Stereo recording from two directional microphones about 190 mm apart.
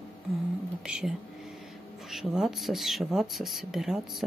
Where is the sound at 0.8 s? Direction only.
5° right (ahead or behind).